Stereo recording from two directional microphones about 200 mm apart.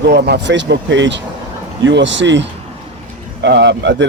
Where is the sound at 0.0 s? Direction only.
55° right (ahead or behind).